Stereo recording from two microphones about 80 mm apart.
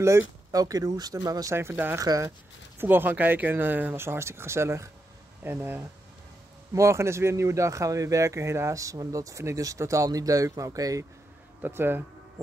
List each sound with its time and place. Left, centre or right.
0.0 s speech: right
1.5 s speech: right
2.0 s speech: right
2.8 s speech: right
6.7 s speech: right
11.6 s speech: right